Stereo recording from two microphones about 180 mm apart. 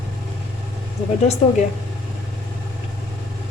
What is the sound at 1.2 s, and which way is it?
Speech, 35° left (ahead or behind).